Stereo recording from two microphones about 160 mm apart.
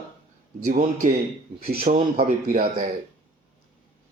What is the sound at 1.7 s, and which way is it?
A man's voice, 65° right (ahead or behind).